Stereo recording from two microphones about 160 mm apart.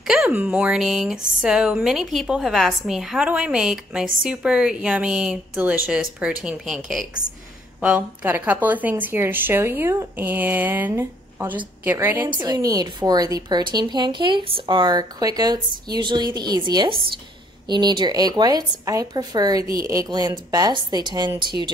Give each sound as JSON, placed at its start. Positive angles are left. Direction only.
{"t": 0.0, "sound": "a woman's voice", "side_deg": -5}